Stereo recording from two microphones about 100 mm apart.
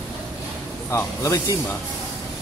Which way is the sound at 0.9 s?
30° left (ahead or behind).